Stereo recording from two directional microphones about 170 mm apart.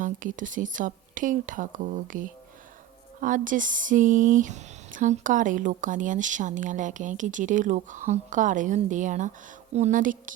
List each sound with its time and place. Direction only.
0.0 s speech: 50° right (ahead or behind)